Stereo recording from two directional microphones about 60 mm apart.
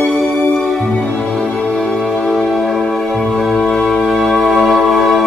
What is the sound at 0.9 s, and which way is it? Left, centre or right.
Music, centre.